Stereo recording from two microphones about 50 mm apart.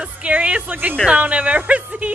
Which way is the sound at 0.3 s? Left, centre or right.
Right.